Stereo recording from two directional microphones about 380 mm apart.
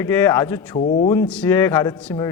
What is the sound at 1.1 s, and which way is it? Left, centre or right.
A man's voice, centre.